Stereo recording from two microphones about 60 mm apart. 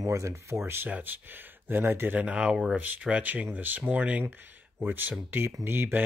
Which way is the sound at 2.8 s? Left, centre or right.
Right.